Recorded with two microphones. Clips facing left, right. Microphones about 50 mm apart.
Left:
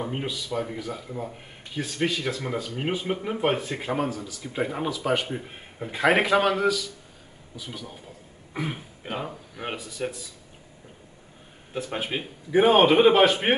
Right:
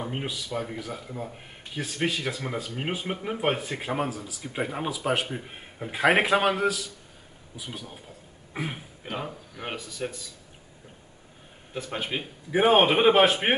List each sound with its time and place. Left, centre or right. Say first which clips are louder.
0.0 s speech: left 2 dB; centre
8.5 s speech: left 2 dB; centre
9.0 s speech: left 2 dB; centre
11.7 s speech: left 2 dB; centre